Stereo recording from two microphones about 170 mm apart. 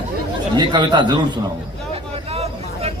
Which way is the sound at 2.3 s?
40° right (ahead or behind).